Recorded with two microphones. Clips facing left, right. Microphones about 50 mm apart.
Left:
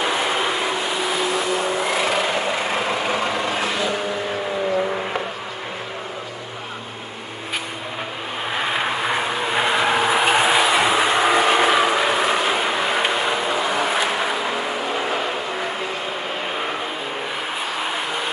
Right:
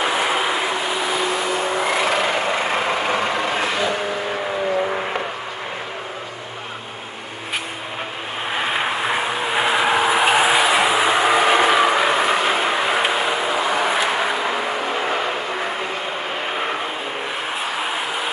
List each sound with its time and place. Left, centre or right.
0.0 s vehicle: centre
8.5 s vehicle: centre
17.7 s vehicle: centre